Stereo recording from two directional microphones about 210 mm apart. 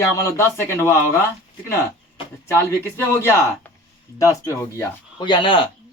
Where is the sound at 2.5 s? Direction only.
10° left (ahead or behind).